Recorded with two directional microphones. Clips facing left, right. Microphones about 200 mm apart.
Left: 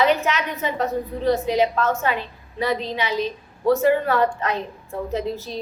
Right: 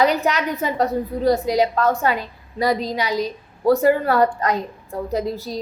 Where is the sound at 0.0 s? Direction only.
40° right (ahead or behind).